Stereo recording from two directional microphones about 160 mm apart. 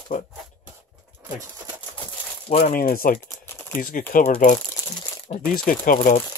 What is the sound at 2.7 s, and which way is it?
Speech, 65° left (ahead or behind).